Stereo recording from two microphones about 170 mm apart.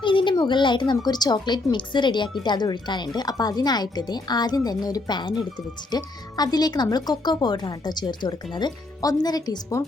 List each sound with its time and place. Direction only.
0.0 s a woman's voice: 30° left (ahead or behind)